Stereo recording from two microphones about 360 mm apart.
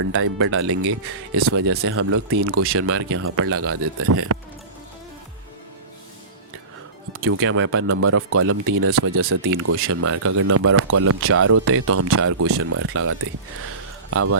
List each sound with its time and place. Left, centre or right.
0.0 s speech: right
7.1 s speech: right